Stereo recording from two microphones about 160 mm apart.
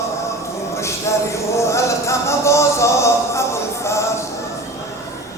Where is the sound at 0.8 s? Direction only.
20° left (ahead or behind).